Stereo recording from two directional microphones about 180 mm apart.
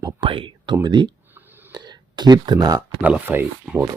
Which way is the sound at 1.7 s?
25° right (ahead or behind).